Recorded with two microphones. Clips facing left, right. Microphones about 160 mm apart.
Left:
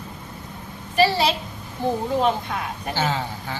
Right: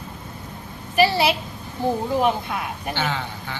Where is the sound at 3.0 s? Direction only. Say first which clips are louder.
Left 3 dB; 35° left (ahead or behind).